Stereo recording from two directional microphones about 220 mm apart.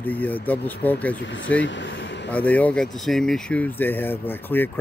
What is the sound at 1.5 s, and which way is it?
Speech, 55° left (ahead or behind).